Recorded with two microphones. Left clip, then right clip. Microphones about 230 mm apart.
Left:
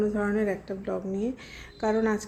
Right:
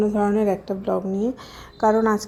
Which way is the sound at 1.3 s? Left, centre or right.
Centre.